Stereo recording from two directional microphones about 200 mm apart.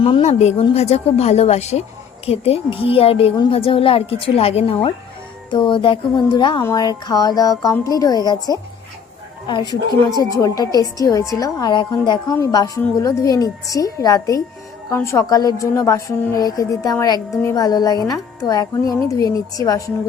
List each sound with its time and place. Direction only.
0.0 s a woman's voice: 30° left (ahead or behind)